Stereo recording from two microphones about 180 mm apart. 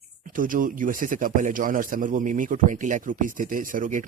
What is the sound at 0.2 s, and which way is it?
Speech, 50° right (ahead or behind).